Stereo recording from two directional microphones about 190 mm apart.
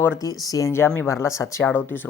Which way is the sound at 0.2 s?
20° left (ahead or behind).